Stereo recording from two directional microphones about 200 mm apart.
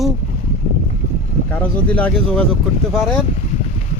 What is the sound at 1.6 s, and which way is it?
Speech, 5° left (ahead or behind).